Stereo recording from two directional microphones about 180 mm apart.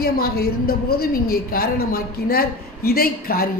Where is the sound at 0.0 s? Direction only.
55° left (ahead or behind).